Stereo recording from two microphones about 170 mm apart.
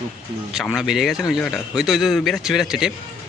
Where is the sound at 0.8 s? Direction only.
Centre (ahead or behind).